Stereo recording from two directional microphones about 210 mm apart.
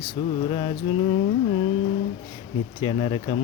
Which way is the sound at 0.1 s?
20° left (ahead or behind).